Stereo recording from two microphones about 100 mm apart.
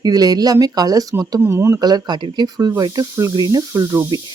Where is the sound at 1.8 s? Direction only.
45° right (ahead or behind).